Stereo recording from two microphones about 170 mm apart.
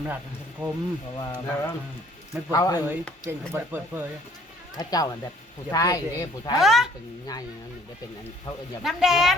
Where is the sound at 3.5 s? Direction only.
10° right (ahead or behind).